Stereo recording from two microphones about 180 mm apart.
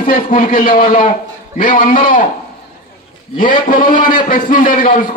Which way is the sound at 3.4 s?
50° left (ahead or behind).